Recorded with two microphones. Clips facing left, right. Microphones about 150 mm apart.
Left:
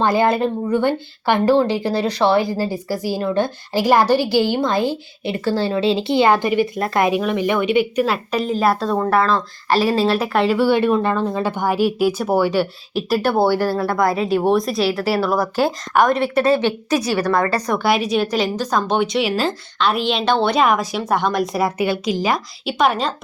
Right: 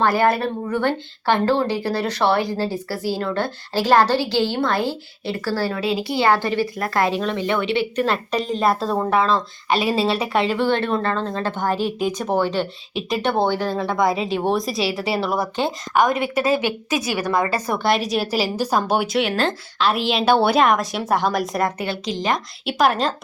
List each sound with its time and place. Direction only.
0.0 s a woman's voice: 20° left (ahead or behind); by 16.7 s 5° right (ahead or behind)
17.2 s a woman's voice: 20° right (ahead or behind)
17.7 s a woman's voice: centre (ahead or behind)